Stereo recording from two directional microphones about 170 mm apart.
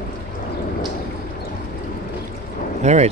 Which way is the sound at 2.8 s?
40° right (ahead or behind).